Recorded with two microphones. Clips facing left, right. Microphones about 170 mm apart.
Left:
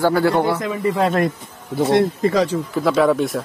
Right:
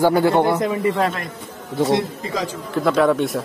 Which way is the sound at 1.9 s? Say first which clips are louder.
Left 5 dB; 65° left (ahead or behind).